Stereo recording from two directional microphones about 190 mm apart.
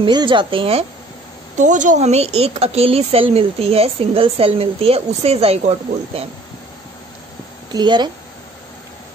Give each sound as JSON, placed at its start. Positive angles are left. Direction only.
{"t": 0.0, "sound": "a woman's voice", "side_deg": -25}
{"t": 1.6, "sound": "speech", "side_deg": -40}
{"t": 7.7, "sound": "a woman's voice", "side_deg": -25}